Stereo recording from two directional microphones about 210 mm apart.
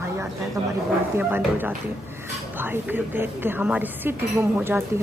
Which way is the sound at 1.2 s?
10° right (ahead or behind).